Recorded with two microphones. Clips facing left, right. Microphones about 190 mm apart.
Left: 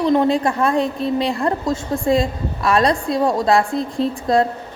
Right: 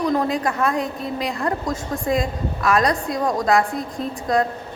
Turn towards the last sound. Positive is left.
turn(degrees=30)  # may be behind; listen again after turning